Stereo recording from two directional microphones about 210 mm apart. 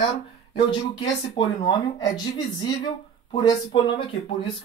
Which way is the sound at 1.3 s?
20° left (ahead or behind).